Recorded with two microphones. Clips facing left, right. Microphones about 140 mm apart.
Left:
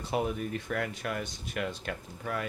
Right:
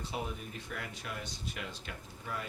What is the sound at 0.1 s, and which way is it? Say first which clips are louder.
Speech: left 12 dB; 60° left (ahead or behind).